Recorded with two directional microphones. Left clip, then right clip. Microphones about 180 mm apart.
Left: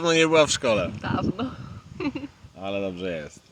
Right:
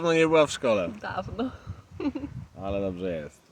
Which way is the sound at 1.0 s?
30° right (ahead or behind).